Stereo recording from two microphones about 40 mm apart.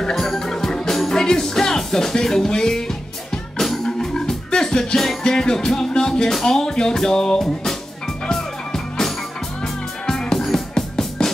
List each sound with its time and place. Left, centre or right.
0.1 s music: centre